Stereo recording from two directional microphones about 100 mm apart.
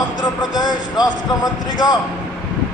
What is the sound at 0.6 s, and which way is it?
Speech, 40° left (ahead or behind).